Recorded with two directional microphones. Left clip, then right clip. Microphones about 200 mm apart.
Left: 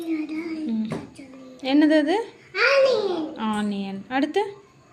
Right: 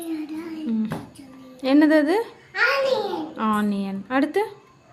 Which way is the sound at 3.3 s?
25° right (ahead or behind).